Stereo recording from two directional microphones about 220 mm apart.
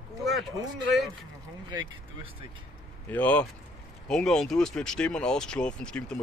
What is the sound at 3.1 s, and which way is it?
Speech, 5° left (ahead or behind).